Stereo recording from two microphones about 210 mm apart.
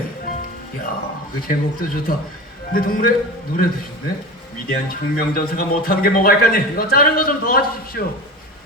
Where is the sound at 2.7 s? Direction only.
45° left (ahead or behind).